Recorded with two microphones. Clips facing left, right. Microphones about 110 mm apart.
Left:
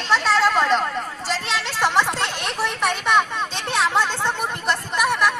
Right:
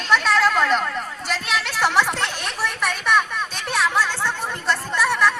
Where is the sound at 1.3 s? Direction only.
30° left (ahead or behind).